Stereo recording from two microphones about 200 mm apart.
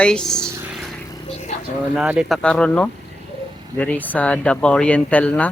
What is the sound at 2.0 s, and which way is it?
Speech, 5° right (ahead or behind).